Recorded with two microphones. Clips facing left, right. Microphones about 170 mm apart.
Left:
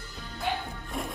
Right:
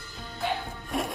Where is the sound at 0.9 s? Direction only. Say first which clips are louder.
Right 5 dB; 90° right.